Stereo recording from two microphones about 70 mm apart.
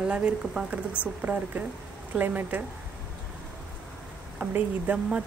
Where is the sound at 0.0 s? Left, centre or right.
Centre.